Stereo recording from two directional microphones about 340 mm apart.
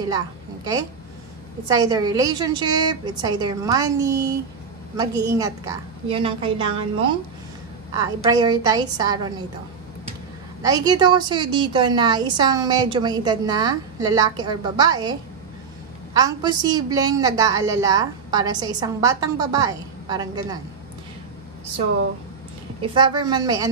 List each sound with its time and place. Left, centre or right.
1.7 s a woman's voice: centre
10.6 s a woman's voice: centre
22.8 s a woman's voice: centre